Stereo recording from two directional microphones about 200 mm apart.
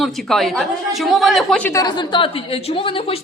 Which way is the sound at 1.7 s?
20° left (ahead or behind).